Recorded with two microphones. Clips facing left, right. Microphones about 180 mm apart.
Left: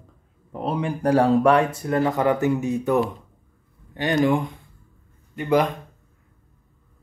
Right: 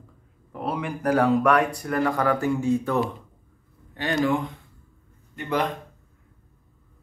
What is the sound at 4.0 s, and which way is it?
Speech, 15° left (ahead or behind).